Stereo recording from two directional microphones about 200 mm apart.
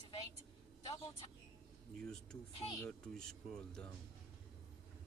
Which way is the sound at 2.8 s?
5° left (ahead or behind).